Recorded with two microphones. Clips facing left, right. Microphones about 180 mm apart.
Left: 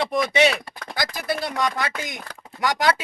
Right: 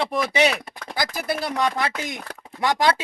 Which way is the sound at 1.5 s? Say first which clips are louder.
Right 2 dB; 30° right (ahead or behind).